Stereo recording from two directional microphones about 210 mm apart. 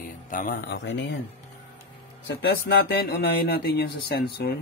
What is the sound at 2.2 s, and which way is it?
Speech, 50° left (ahead or behind).